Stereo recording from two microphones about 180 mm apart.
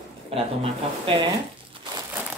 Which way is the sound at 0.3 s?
35° right (ahead or behind).